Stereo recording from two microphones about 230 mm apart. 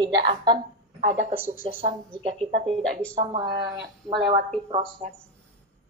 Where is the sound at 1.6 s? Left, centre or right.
Right.